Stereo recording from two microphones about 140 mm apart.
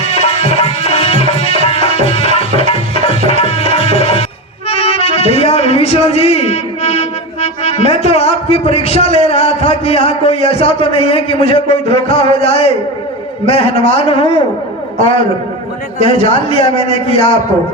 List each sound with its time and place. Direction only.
0.6 s music: 45° left (ahead or behind)
7.9 s a man's voice: 50° left (ahead or behind)
16.0 s a man's voice: 40° left (ahead or behind)